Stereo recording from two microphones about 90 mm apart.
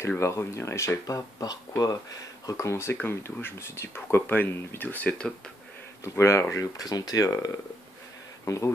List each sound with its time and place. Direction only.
0.2 s speech: 30° left (ahead or behind)
6.0 s speech: 30° left (ahead or behind)
6.5 s speech: 40° left (ahead or behind)